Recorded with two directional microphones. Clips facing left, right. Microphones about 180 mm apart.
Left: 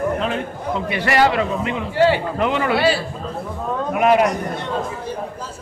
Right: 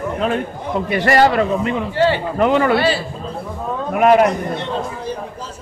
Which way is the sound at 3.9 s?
45° right (ahead or behind).